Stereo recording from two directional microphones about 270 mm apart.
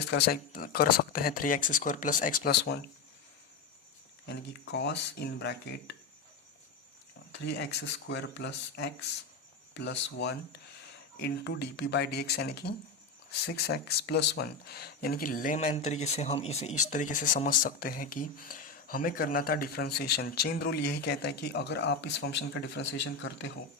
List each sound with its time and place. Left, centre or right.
0.1 s speech: left
4.3 s speech: left
7.3 s speech: left